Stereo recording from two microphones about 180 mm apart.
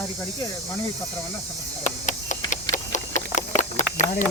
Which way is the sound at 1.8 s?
45° left (ahead or behind).